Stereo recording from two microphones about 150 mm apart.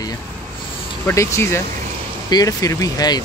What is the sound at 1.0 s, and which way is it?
Speech, 20° left (ahead or behind).